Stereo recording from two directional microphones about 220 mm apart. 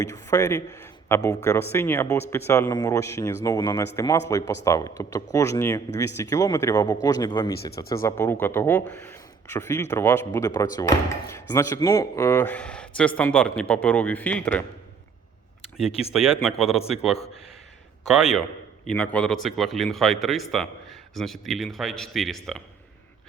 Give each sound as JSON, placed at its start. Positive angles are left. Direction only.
{"t": 0.0, "sound": "speech", "side_deg": 15}
{"t": 15.8, "sound": "speech", "side_deg": 25}
{"t": 16.1, "sound": "speech", "side_deg": 0}
{"t": 18.9, "sound": "speech", "side_deg": 5}